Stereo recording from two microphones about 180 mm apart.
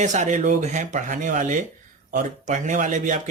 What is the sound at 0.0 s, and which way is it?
Speech, 45° right (ahead or behind).